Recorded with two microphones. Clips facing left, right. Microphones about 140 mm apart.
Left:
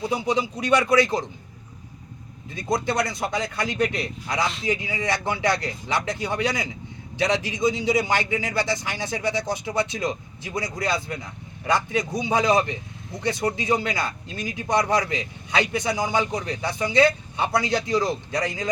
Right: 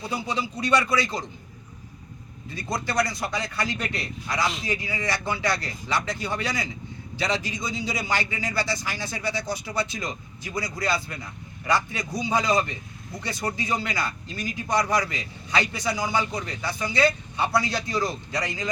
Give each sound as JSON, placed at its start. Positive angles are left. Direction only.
{"t": 0.1, "sound": "a man's voice", "side_deg": 20}
{"t": 2.6, "sound": "a man's voice", "side_deg": 20}